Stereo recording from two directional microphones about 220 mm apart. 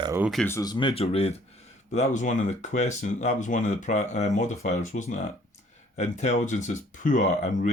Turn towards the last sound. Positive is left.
turn(degrees=35)  # may be behind; listen again after turning